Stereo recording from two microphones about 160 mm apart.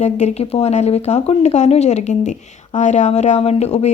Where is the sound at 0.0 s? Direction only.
45° left (ahead or behind).